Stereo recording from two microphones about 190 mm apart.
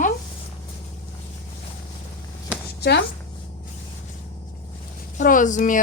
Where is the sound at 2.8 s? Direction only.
60° left (ahead or behind).